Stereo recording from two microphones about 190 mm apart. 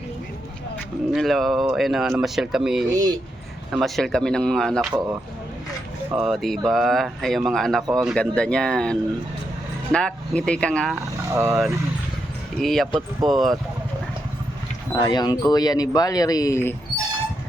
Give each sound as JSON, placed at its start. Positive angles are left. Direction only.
{"t": 1.1, "sound": "speech", "side_deg": 0}
{"t": 2.9, "sound": "speech", "side_deg": -20}
{"t": 3.7, "sound": "speech", "side_deg": 0}
{"t": 4.9, "sound": "speech", "side_deg": -15}
{"t": 6.3, "sound": "speech", "side_deg": 0}
{"t": 10.9, "sound": "speech", "side_deg": -15}
{"t": 12.5, "sound": "speech", "side_deg": 0}
{"t": 14.9, "sound": "speech", "side_deg": 20}